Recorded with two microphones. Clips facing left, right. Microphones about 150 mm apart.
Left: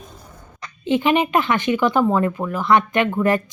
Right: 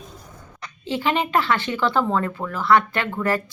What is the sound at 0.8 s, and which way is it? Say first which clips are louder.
Speech: left 5 dB; 20° left (ahead or behind).